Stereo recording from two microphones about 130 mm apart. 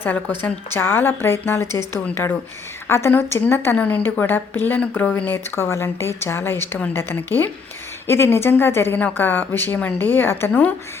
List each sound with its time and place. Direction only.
0.4 s a woman's voice: 15° left (ahead or behind)